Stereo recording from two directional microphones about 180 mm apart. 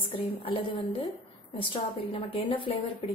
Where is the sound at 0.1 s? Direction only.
30° left (ahead or behind).